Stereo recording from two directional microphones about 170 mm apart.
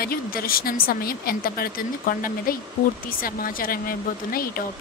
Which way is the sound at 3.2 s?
55° left (ahead or behind).